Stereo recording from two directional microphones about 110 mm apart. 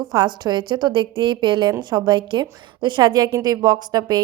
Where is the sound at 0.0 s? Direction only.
40° right (ahead or behind).